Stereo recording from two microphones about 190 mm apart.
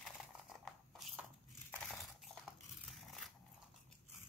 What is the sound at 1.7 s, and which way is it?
Crushing, centre (ahead or behind).